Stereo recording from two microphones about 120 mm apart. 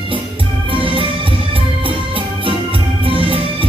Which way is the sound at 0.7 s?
45° right (ahead or behind).